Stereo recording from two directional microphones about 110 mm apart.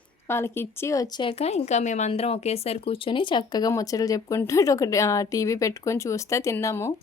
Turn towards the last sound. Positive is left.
turn(degrees=25)  # may be behind; listen again after turning